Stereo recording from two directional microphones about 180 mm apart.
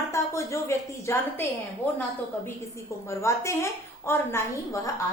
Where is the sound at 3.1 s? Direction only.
15° left (ahead or behind).